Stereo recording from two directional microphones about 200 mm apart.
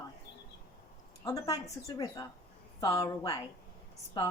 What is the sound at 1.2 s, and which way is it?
A woman's voice, 15° left (ahead or behind).